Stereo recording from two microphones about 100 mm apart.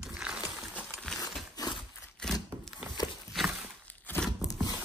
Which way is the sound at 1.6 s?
40° left (ahead or behind).